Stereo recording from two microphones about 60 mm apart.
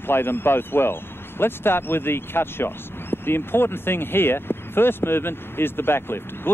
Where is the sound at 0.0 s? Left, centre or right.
Left.